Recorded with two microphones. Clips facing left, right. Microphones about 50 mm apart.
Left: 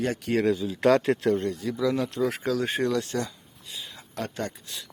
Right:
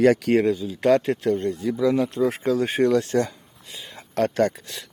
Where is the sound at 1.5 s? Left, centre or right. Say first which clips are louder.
Right 5 dB; right.